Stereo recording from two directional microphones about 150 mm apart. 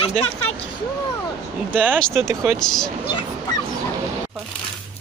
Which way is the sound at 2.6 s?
5° left (ahead or behind).